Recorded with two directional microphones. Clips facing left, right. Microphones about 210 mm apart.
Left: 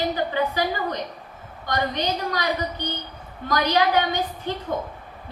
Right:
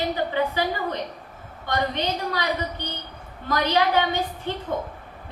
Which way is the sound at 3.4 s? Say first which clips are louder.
Left 1 dB; 25° right (ahead or behind).